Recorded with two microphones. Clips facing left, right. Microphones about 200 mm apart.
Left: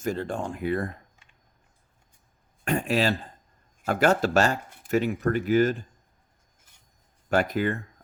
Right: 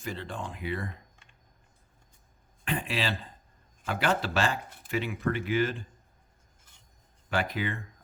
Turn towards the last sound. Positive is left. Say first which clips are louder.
# left 7 dB
turn(degrees=45)  # may be behind; listen again after turning